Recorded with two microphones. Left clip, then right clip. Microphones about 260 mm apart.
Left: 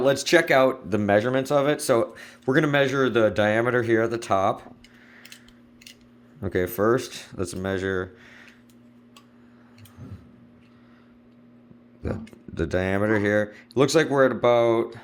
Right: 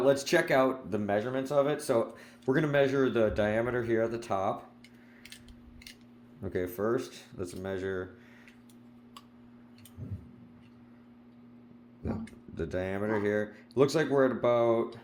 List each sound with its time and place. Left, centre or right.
0.0 s speech: left
6.4 s speech: left
12.0 s speech: left